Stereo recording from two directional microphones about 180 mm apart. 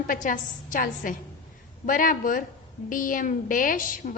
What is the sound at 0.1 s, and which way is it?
A woman's voice, 50° left (ahead or behind).